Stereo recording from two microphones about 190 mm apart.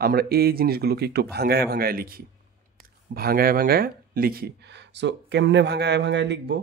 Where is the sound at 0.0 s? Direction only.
55° right (ahead or behind).